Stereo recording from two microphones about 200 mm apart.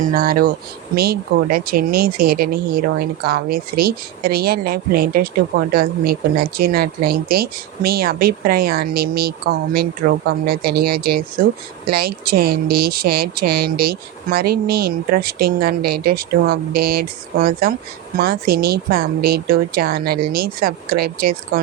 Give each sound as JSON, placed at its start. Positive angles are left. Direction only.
{"t": 0.0, "sound": "speech", "side_deg": -45}